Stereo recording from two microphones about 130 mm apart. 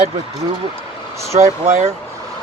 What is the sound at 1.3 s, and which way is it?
Speech, 55° right (ahead or behind).